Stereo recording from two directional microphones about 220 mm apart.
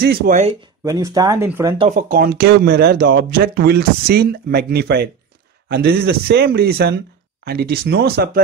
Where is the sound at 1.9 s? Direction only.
40° right (ahead or behind).